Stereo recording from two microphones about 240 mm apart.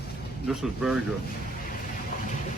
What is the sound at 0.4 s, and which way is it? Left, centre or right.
Speech, centre.